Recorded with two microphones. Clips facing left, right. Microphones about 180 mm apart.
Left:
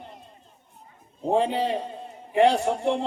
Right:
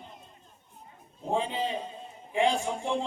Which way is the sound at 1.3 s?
65° left (ahead or behind).